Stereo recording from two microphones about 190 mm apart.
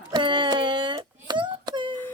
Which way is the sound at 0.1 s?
25° right (ahead or behind).